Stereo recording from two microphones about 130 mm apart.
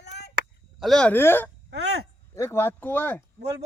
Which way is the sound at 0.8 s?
5° left (ahead or behind).